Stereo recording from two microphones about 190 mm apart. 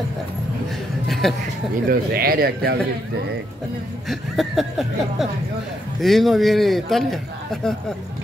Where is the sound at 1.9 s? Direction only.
50° right (ahead or behind).